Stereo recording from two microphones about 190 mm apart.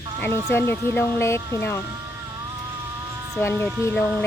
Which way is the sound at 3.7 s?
10° right (ahead or behind).